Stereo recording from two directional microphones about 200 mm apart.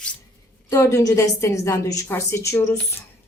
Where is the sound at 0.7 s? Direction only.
15° left (ahead or behind).